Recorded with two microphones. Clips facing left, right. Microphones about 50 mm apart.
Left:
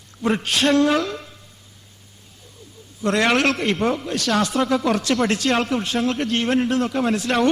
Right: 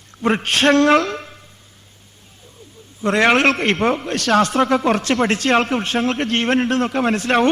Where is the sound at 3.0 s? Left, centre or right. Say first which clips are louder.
Right 4 dB; right.